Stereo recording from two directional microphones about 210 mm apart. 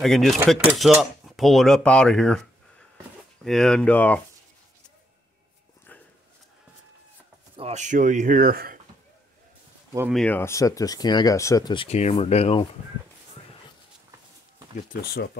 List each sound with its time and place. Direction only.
0.0 s cutlery: centre (ahead or behind)
3.4 s cutlery: centre (ahead or behind)
7.5 s speech: 30° right (ahead or behind)
10.1 s speech: 10° left (ahead or behind); by 12.6 s 30° left (ahead or behind)
14.9 s speech: 50° left (ahead or behind)